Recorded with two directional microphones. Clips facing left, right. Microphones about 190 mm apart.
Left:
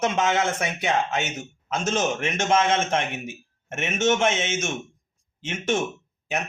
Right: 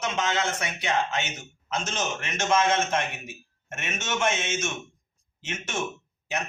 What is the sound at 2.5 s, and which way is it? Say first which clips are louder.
Speech: left 1 dB; 25° left (ahead or behind).